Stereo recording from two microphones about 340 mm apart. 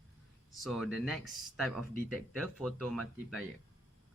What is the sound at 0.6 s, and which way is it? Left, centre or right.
Speech, centre.